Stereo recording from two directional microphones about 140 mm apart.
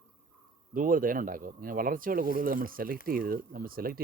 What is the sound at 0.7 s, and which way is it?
Speech, 80° right.